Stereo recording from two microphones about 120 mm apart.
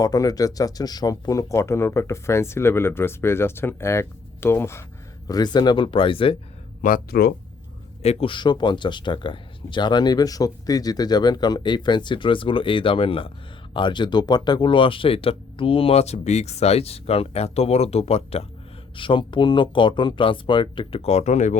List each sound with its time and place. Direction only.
0.0 s speech: 30° left (ahead or behind)
5.3 s speech: 35° left (ahead or behind)
8.0 s speech: 60° left (ahead or behind)
8.3 s speech: 40° left (ahead or behind); by 18.4 s 55° left (ahead or behind)
18.9 s speech: 45° left (ahead or behind); by 21.6 s 85° left